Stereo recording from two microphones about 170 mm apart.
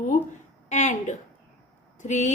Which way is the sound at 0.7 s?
45° left (ahead or behind).